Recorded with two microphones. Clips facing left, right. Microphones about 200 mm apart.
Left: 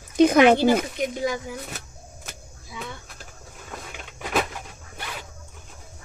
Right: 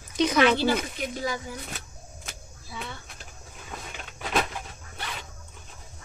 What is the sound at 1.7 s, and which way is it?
Power windows, 5° left (ahead or behind).